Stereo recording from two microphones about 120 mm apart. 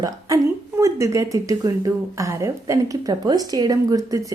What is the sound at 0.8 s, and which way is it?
Speech, 25° right (ahead or behind).